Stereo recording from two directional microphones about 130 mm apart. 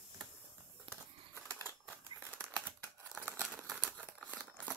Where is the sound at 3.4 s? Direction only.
Centre (ahead or behind).